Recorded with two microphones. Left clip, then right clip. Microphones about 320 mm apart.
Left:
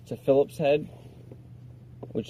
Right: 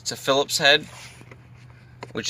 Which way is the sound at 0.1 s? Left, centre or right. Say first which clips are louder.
Right 1 dB; centre.